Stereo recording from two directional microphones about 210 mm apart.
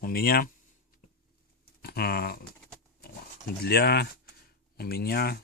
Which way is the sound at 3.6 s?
50° left (ahead or behind).